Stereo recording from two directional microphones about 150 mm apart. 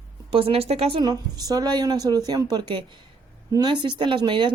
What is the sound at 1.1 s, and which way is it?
A woman's voice, 25° right (ahead or behind).